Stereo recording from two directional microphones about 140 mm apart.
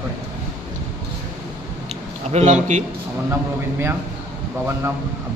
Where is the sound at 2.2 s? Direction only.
50° right (ahead or behind).